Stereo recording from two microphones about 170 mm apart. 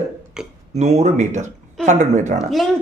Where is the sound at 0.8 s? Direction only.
40° right (ahead or behind).